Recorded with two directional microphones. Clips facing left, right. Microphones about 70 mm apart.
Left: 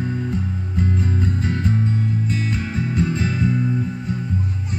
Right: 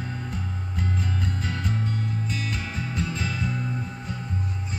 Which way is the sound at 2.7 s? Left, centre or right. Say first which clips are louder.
Left 8 dB; left.